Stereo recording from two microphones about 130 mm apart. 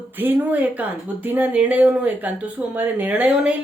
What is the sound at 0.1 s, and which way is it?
Speech, 15° right (ahead or behind).